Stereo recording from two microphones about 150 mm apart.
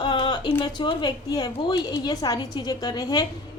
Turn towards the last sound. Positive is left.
turn(degrees=25)  # may be behind; listen again after turning